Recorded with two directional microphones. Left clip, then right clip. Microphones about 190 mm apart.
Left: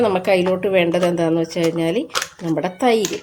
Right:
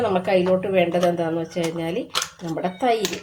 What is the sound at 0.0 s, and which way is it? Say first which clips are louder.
A woman's voice: left 3 dB; 55° left (ahead or behind).